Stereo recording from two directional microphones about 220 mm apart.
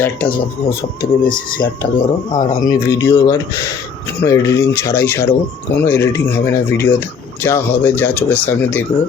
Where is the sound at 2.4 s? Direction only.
35° left (ahead or behind).